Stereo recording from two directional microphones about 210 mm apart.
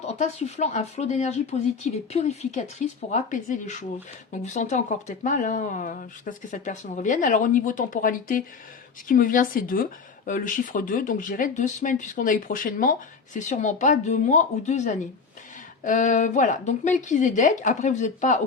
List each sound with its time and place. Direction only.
0.0 s speech: 30° left (ahead or behind)